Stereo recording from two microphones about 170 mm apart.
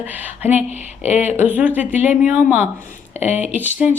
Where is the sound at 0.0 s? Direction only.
10° right (ahead or behind).